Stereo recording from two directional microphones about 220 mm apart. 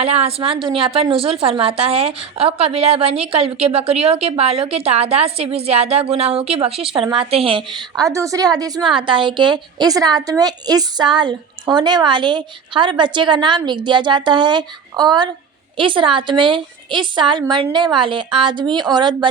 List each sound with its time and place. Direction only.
0.0 s a woman's voice: 25° right (ahead or behind)